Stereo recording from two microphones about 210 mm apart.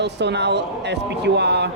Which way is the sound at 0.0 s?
55° right (ahead or behind).